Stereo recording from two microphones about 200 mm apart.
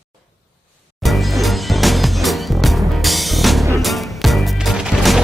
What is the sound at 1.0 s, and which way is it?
Music, centre (ahead or behind).